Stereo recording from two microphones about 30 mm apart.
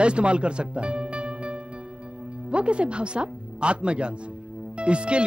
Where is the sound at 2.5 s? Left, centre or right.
Right.